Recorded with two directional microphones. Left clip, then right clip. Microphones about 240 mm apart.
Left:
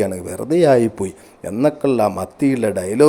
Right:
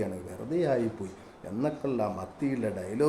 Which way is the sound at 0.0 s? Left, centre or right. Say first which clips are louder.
Left 14 dB; left.